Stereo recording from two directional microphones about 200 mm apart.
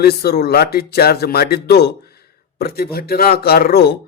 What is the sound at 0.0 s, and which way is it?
A man's voice, 50° left (ahead or behind).